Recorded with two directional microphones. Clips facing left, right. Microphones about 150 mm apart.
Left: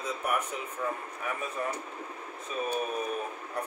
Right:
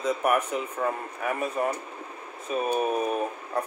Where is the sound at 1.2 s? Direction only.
70° right (ahead or behind).